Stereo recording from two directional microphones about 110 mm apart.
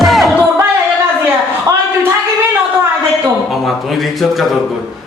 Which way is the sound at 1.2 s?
20° right (ahead or behind).